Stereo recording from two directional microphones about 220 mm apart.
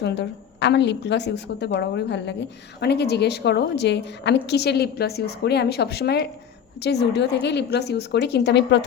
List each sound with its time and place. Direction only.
0.0 s a woman's voice: 50° left (ahead or behind)